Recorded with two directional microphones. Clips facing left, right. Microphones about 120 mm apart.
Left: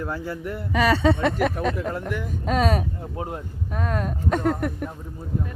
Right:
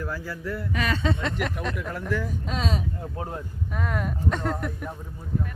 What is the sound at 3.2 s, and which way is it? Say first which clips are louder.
Speech: left 4 dB; 20° left (ahead or behind).